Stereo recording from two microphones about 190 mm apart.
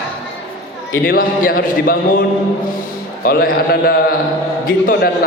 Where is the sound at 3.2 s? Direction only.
50° left (ahead or behind).